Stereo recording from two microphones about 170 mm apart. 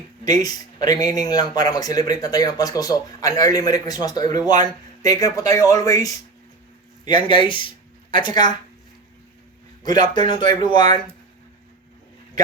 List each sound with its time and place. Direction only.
0.3 s speech: 25° left (ahead or behind)
9.8 s speech: 25° left (ahead or behind)